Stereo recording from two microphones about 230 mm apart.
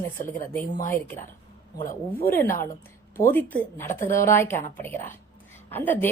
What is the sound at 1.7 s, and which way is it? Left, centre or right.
Speech, left.